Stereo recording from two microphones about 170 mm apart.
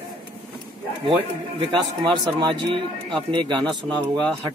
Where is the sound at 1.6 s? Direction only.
30° right (ahead or behind).